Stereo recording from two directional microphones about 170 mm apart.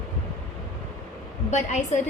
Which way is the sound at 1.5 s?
45° left (ahead or behind).